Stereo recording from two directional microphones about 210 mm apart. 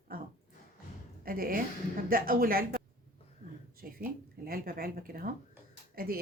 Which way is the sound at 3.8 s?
45° right (ahead or behind).